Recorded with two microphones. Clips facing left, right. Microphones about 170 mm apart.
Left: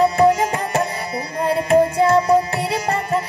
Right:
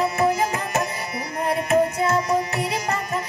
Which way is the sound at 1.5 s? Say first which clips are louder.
Left 4 dB; 30° left (ahead or behind).